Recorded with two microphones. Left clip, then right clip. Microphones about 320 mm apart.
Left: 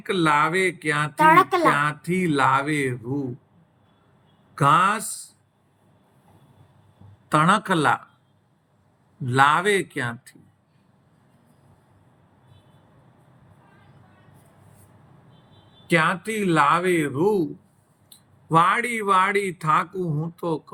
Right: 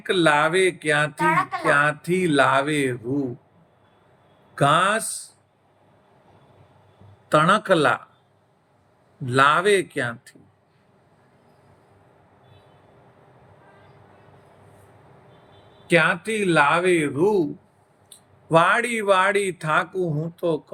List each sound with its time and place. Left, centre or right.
0.1 s speech: centre
1.1 s speech: left
1.7 s speech: centre
4.5 s speech: centre
7.3 s speech: centre
9.2 s speech: centre
15.9 s speech: centre
18.5 s speech: centre